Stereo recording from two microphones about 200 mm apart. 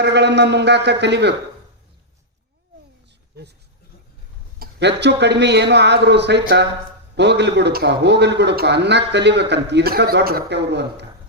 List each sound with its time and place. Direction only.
0.0 s a man's voice: 60° right (ahead or behind)
4.6 s a man's voice: 60° right (ahead or behind)